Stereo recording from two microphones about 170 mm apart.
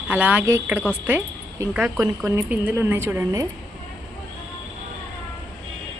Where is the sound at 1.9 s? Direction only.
20° right (ahead or behind).